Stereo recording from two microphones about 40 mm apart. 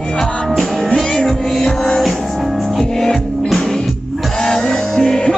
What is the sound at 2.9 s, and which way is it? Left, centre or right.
Music, centre.